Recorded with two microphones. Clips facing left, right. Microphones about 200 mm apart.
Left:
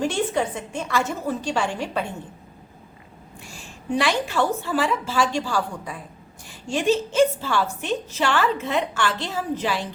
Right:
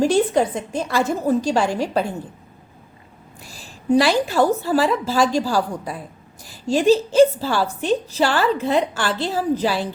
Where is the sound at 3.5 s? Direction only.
35° right (ahead or behind).